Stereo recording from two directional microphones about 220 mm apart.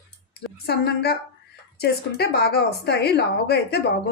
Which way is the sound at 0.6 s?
45° left (ahead or behind).